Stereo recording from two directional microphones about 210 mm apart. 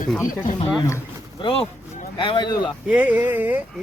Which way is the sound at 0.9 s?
15° left (ahead or behind).